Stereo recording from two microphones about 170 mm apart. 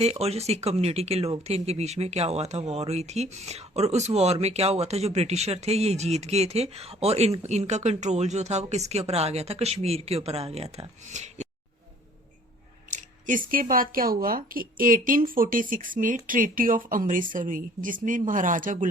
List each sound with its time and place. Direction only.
0.0 s speech: 35° right (ahead or behind)
12.9 s speech: 50° right (ahead or behind)